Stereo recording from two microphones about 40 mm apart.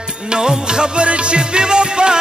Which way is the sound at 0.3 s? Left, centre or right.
Centre.